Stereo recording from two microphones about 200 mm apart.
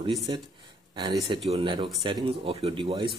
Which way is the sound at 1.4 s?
25° right (ahead or behind).